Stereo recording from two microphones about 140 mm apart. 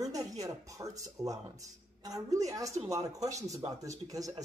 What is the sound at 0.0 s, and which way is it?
Speech, 25° right (ahead or behind).